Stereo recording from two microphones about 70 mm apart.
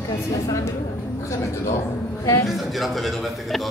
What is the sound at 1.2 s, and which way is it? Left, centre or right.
A woman's voice, left.